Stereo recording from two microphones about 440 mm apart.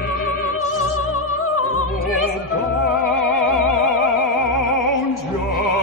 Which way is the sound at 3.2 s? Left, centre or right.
Left.